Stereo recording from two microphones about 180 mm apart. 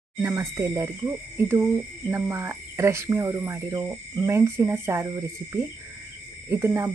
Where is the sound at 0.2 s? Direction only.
15° right (ahead or behind).